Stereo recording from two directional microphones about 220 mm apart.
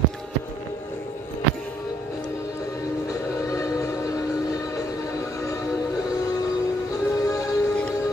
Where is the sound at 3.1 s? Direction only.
15° left (ahead or behind).